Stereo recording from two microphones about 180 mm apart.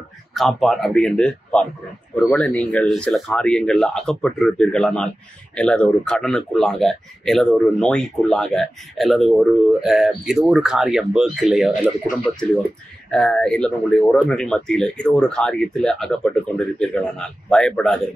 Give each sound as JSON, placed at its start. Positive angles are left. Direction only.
{"t": 0.3, "sound": "speech", "side_deg": 0}
{"t": 13.1, "sound": "speech", "side_deg": 5}